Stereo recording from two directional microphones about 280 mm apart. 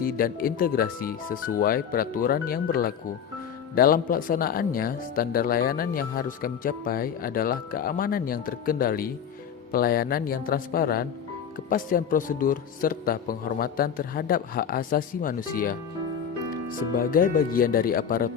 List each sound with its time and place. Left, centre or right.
0.0 s speech: left
16.9 s speech: left